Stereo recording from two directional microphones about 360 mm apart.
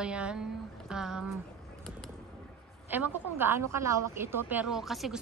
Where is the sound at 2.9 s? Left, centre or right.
Centre.